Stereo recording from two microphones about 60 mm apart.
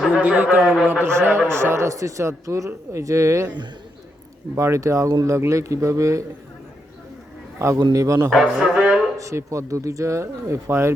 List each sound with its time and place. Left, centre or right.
0.1 s a man's voice: right
0.6 s speech: centre
1.0 s speech: right
4.5 s speech: right
7.6 s speech: right
8.3 s speech: centre
9.1 s speech: right